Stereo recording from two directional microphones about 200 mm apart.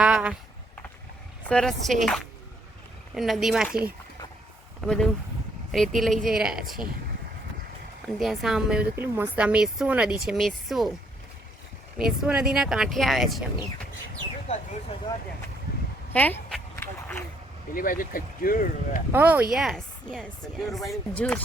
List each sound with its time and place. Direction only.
0.0 s a sound: 5° right (ahead or behind)
1.5 s a woman's voice: 5° left (ahead or behind)
8.0 s a woman's voice: centre (ahead or behind)
11.9 s a woman's voice: 5° right (ahead or behind)
14.4 s speech: 35° left (ahead or behind)
16.1 s a sound: 10° left (ahead or behind)
17.7 s speech: 45° left (ahead or behind)
19.1 s a woman's voice: 10° right (ahead or behind)